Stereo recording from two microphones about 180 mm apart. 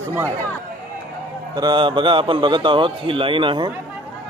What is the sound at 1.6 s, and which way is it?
Speech, 25° right (ahead or behind).